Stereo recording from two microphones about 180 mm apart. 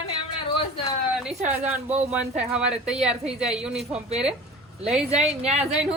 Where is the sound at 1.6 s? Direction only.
35° right (ahead or behind).